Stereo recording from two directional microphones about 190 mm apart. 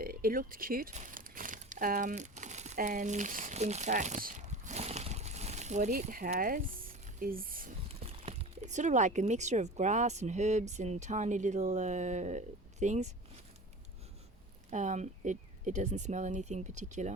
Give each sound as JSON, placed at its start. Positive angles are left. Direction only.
{"t": 0.0, "sound": "crumpling", "side_deg": -50}
{"t": 5.9, "sound": "speech", "side_deg": -45}
{"t": 7.9, "sound": "speech", "side_deg": -35}
{"t": 14.7, "sound": "speech", "side_deg": -40}